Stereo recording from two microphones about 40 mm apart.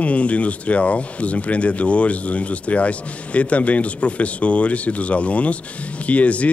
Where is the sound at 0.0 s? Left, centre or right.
Left.